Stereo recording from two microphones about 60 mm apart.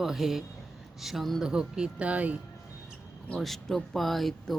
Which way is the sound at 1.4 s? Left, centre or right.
Centre.